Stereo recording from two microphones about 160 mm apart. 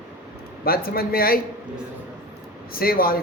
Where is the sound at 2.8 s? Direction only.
65° left (ahead or behind).